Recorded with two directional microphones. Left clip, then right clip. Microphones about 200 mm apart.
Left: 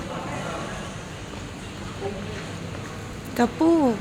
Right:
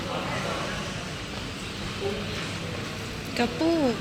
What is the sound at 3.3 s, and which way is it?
Speech, 30° left (ahead or behind).